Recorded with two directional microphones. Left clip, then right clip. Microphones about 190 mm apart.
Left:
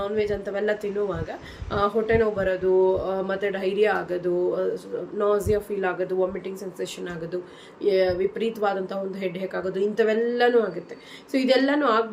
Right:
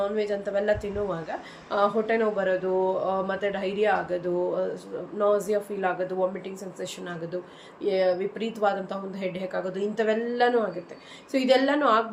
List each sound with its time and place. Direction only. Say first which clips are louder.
0.0 s a woman's voice: left 1 dB; 5° left (ahead or behind)